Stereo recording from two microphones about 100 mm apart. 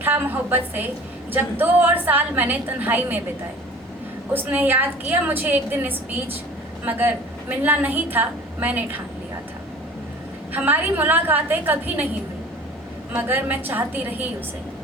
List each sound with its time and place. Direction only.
0.0 s a woman's voice: 20° right (ahead or behind)
4.4 s a woman's voice: 20° right (ahead or behind)
10.5 s a woman's voice: 20° right (ahead or behind)
13.1 s a woman's voice: 20° right (ahead or behind)